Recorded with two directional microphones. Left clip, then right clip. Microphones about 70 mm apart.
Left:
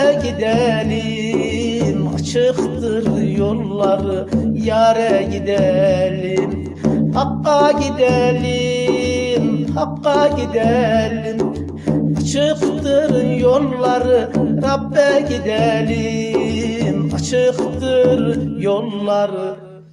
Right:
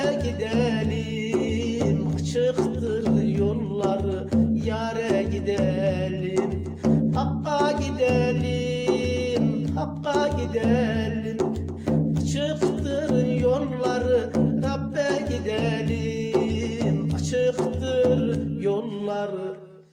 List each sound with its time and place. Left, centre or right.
0.0 s music: left
4.6 s music: left
7.2 s music: left
12.4 s music: left
17.3 s music: left
18.6 s mantra: left